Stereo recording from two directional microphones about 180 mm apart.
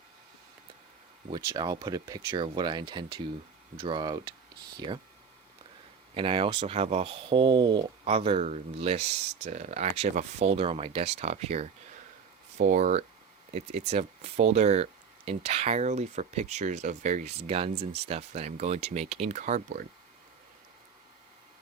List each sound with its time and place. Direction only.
1.3 s speech: 20° right (ahead or behind)
6.1 s speech: 30° right (ahead or behind)